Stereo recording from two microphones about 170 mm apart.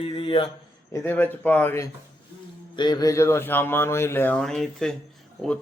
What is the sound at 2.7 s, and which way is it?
Speech, 25° left (ahead or behind).